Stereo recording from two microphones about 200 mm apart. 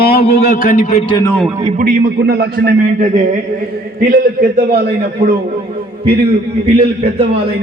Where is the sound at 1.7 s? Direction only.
50° right (ahead or behind).